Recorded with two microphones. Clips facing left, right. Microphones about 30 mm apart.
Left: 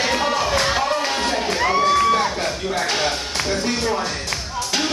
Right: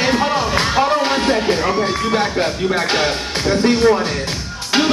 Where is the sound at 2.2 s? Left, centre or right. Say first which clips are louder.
Right 4 dB; right.